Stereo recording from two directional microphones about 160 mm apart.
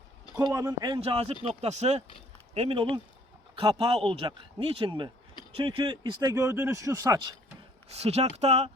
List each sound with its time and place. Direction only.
0.3 s speech: 20° right (ahead or behind)
8.0 s speech: 40° right (ahead or behind)